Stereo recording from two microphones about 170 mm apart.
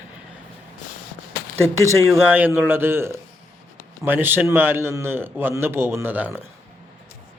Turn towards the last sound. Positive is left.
turn(degrees=-10)  # may be behind; listen again after turning